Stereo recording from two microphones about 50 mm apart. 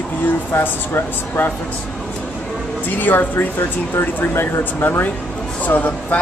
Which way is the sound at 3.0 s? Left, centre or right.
Left.